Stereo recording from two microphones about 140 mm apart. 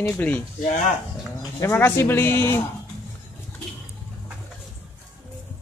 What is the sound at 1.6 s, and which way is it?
Speech, 15° left (ahead or behind).